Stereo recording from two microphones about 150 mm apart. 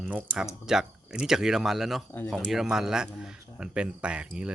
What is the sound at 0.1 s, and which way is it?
Speech, 10° right (ahead or behind).